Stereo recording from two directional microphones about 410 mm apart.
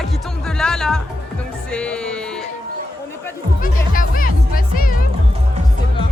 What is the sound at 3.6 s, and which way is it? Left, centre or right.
Music, centre.